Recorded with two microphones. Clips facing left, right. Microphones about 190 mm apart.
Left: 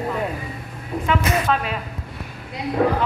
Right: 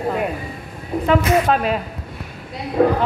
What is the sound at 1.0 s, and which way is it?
Speech, 40° right (ahead or behind).